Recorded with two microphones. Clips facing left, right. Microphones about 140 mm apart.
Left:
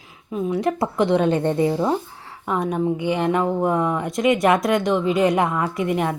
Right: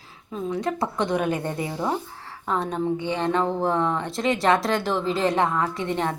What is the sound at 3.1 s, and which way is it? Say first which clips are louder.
Speech: left 2 dB; 15° left (ahead or behind).